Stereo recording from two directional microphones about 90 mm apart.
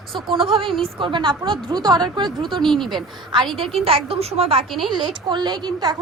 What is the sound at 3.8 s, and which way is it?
Speech, 90° right.